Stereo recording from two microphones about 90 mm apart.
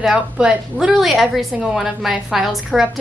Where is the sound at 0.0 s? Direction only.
10° right (ahead or behind).